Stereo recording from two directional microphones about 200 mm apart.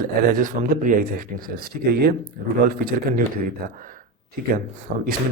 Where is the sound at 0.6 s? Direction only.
40° right (ahead or behind).